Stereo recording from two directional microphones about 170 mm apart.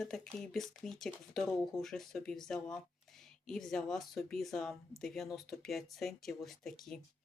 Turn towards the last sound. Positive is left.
turn(degrees=0)  # may be behind; listen again after turning